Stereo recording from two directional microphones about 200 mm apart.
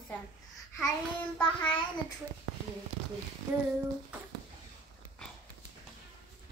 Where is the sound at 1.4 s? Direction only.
25° left (ahead or behind).